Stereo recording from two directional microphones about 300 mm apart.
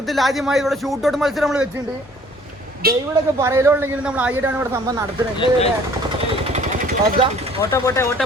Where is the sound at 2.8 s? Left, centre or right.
Right.